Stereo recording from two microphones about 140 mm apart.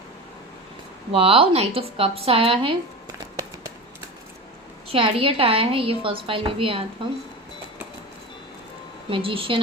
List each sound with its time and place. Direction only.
1.1 s speech: 45° right (ahead or behind)
4.9 s a woman's voice: 40° right (ahead or behind)
9.0 s a woman's voice: 40° right (ahead or behind)